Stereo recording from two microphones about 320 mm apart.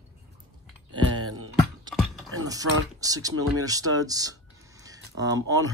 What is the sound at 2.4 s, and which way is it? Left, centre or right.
Speech, centre.